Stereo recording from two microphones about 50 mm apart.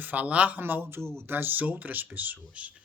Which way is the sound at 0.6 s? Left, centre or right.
Right.